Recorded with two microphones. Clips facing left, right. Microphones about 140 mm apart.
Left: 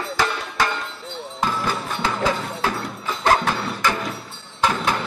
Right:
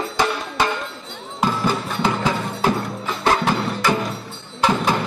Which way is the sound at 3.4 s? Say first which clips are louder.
Right 3 dB; 15° right (ahead or behind).